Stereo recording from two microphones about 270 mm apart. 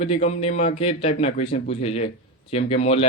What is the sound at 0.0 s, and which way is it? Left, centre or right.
A man's voice, left.